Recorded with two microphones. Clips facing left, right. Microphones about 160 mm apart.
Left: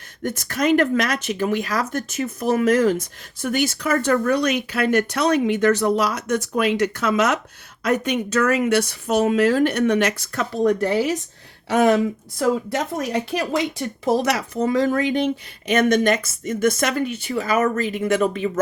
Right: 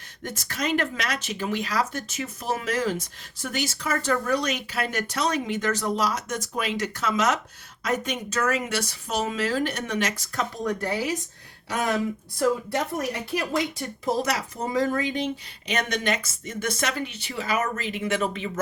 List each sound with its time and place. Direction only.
0.2 s speech: 50° left (ahead or behind)
12.4 s speech: 90° left; by 18.6 s 45° left (ahead or behind)